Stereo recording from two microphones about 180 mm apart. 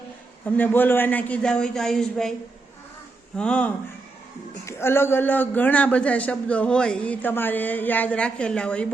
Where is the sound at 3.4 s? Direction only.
5° left (ahead or behind).